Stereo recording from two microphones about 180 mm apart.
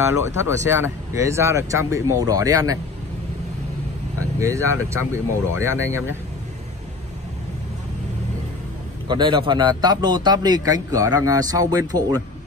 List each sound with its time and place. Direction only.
0.0 s speech: 15° right (ahead or behind)
4.4 s speech: 15° right (ahead or behind)
9.0 s a man's voice: 25° right (ahead or behind)